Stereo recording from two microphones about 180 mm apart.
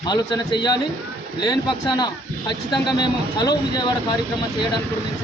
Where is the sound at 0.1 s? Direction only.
25° left (ahead or behind).